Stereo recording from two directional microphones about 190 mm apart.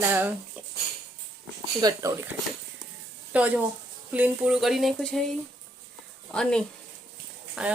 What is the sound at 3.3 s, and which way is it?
Speech, 5° right (ahead or behind).